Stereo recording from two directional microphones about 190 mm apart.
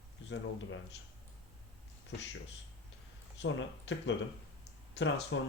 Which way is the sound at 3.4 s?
70° left (ahead or behind).